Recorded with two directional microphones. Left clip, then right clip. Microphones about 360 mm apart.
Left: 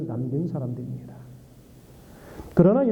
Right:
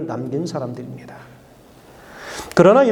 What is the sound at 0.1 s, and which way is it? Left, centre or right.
Speech, centre.